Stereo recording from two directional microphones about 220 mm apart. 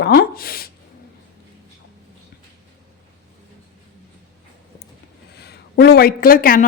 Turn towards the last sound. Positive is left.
turn(degrees=40)  # may be behind; listen again after turning